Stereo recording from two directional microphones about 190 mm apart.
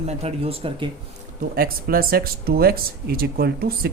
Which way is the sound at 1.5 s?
50° right (ahead or behind).